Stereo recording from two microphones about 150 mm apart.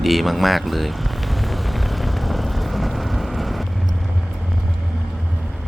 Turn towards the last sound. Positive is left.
turn(degrees=0)  # may be behind; listen again after turning